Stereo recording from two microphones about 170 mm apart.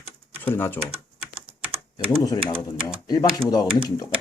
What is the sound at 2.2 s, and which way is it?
Speech, 20° left (ahead or behind).